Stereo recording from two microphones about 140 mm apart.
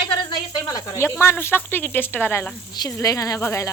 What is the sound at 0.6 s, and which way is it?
Speech, 25° left (ahead or behind).